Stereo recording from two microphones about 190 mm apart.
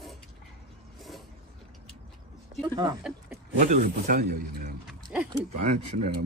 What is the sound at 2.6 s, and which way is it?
Speech, 20° right (ahead or behind).